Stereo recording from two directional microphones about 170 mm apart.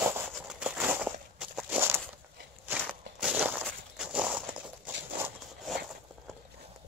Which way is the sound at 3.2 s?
10° right (ahead or behind).